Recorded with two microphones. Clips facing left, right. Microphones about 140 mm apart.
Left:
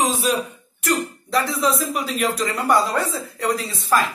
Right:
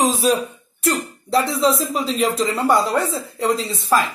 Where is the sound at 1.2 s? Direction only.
30° right (ahead or behind).